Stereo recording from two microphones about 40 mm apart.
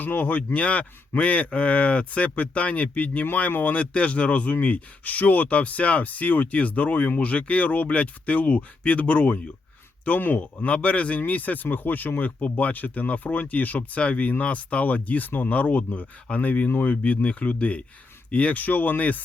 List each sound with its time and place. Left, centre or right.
0.0 s speech: left
3.8 s speech: left
10.1 s speech: left
10.7 s speech: left
12.4 s speech: left